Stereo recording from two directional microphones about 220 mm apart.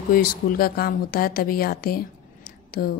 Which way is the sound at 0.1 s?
40° left (ahead or behind).